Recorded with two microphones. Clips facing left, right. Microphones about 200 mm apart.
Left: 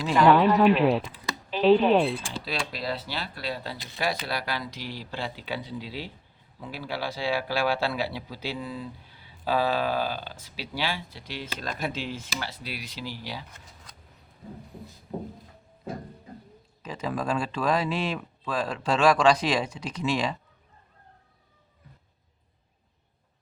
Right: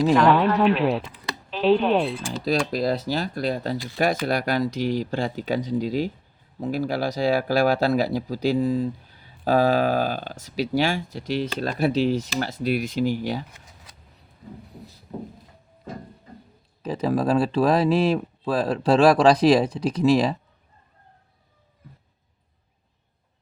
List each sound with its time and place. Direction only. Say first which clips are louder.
0.2 s speech: even; centre (ahead or behind)
2.4 s speech: right 10 dB; 45° right (ahead or behind)
16.8 s speech: right 8 dB; 35° right (ahead or behind)